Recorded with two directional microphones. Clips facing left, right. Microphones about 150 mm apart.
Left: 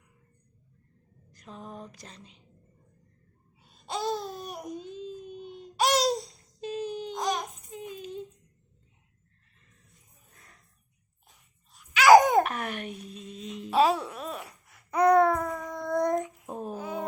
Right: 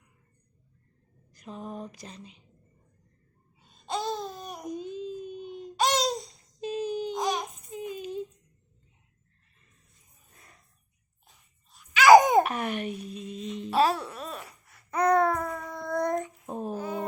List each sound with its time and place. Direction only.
1.3 s a sound: 5° right (ahead or behind)
3.6 s babbling: 10° left (ahead or behind)
4.7 s baby cry: centre (ahead or behind)
11.3 s babbling: 5° left (ahead or behind)
15.8 s child singing: centre (ahead or behind)